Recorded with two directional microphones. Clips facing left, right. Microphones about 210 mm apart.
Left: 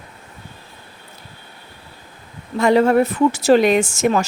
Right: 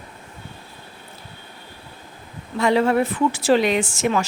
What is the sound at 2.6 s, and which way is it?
A woman's voice, 45° left (ahead or behind).